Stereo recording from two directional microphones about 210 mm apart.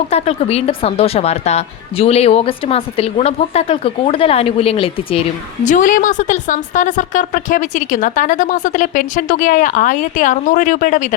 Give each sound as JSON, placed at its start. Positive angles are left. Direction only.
{"t": 0.1, "sound": "speech", "side_deg": 30}
{"t": 5.6, "sound": "a woman's voice", "side_deg": 40}